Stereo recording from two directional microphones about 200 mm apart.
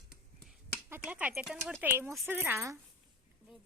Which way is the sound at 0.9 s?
10° right (ahead or behind).